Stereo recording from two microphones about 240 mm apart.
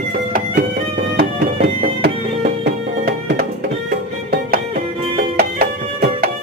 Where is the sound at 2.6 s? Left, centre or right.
Right.